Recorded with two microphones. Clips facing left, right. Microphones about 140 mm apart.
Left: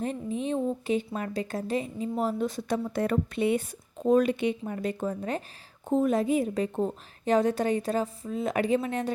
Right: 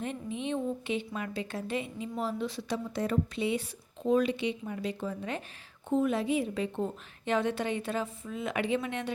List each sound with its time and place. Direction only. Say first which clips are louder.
0.0 s a woman's voice: left 4 dB; 40° left (ahead or behind)